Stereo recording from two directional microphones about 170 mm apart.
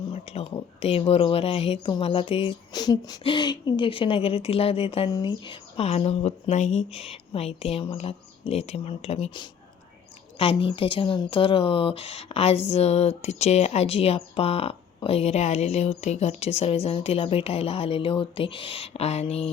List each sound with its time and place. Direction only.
0.1 s speech: 35° left (ahead or behind)
10.6 s speech: 30° left (ahead or behind)